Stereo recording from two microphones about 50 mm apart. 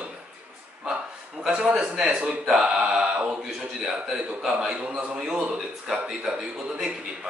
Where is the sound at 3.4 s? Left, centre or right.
Centre.